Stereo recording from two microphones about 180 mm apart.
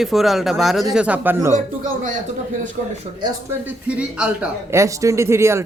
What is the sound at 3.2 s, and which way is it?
A man's voice, 10° right (ahead or behind).